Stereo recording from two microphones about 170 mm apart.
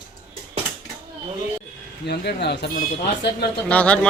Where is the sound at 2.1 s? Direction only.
75° left (ahead or behind).